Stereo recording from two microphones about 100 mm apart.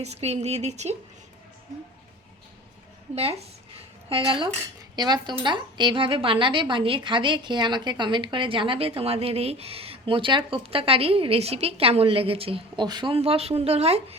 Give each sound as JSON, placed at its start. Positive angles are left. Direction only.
{"t": 0.0, "sound": "speech", "side_deg": -90}
{"t": 3.2, "sound": "speech", "side_deg": -90}
{"t": 4.9, "sound": "a woman's voice", "side_deg": -45}
{"t": 12.8, "sound": "speech", "side_deg": -50}
{"t": 13.1, "sound": "speech", "side_deg": -85}